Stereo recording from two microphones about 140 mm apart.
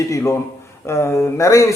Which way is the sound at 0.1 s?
20° left (ahead or behind).